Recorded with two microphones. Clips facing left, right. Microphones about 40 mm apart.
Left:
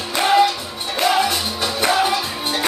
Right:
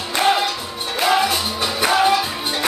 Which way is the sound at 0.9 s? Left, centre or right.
Centre.